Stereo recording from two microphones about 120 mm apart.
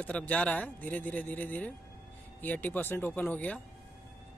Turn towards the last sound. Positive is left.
turn(degrees=15)  # may be behind; listen again after turning